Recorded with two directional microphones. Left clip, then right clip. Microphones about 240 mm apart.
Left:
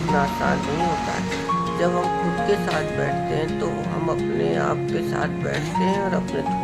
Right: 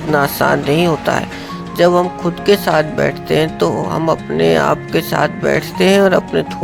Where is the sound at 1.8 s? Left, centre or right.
Right.